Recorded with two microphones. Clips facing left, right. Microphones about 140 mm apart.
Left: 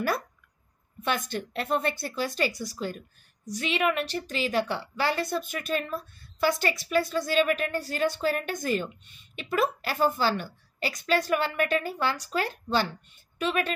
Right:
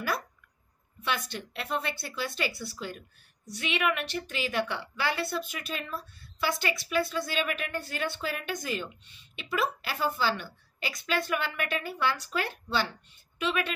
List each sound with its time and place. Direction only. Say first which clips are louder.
1.0 s a woman's voice: left 4 dB; 45° left (ahead or behind)